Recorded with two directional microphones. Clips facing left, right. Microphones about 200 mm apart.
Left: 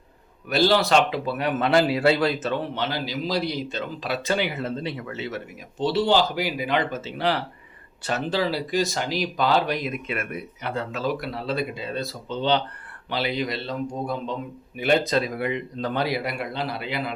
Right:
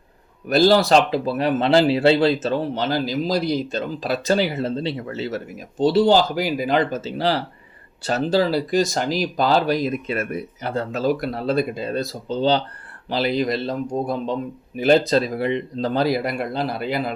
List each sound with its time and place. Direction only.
0.4 s speech: 40° right (ahead or behind)
14.8 s speech: 35° right (ahead or behind)